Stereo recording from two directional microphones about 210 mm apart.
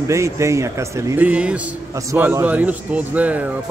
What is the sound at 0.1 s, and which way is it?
A man's voice, 15° right (ahead or behind).